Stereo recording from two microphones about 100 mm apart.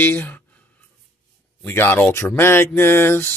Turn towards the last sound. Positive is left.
turn(degrees=20)  # may be behind; listen again after turning